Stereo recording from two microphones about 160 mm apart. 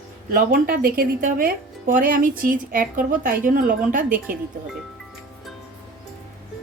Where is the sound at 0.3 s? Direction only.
65° right (ahead or behind).